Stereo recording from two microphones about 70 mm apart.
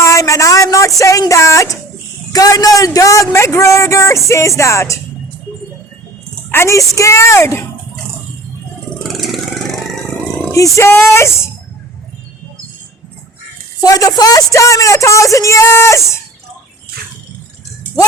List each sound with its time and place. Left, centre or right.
0.0 s a sound: left
1.3 s speech: left
6.5 s speech: left
9.0 s vehicle: centre
10.5 s speech: left
13.8 s speech: left
15.6 s speech: left